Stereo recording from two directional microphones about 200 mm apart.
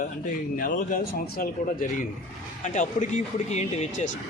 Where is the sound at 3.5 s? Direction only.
35° left (ahead or behind).